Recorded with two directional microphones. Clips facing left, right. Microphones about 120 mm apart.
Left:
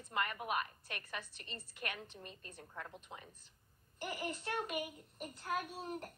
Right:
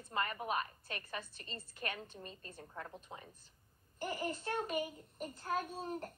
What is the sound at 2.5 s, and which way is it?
Speech, 15° right (ahead or behind).